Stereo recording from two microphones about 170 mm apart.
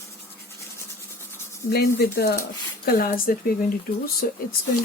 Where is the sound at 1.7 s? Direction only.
70° left (ahead or behind).